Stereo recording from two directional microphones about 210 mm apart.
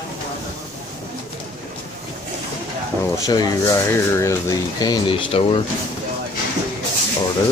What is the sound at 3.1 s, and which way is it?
Speech, 15° left (ahead or behind).